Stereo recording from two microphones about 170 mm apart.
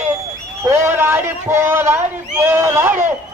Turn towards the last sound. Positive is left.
turn(degrees=-15)  # may be behind; listen again after turning